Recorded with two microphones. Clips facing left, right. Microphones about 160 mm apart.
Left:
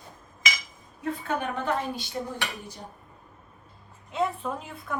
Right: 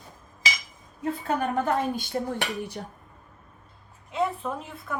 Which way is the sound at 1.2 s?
45° right (ahead or behind).